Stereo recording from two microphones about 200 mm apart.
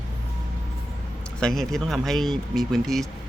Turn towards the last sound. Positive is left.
turn(degrees=0)  # may be behind; listen again after turning